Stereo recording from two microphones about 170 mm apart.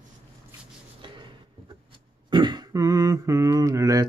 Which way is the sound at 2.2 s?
25° right (ahead or behind).